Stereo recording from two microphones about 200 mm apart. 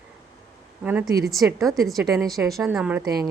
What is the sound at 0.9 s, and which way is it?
A woman's voice, 10° right (ahead or behind).